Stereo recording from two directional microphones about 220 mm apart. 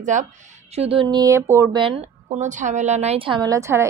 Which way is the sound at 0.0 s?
35° right (ahead or behind).